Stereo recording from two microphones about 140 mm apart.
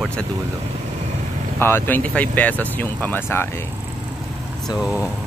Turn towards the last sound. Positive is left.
turn(degrees=15)  # may be behind; listen again after turning